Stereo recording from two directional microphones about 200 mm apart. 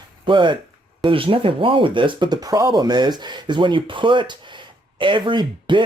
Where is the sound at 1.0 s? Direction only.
25° right (ahead or behind).